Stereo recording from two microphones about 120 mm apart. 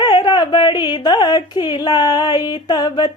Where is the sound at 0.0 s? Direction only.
40° left (ahead or behind).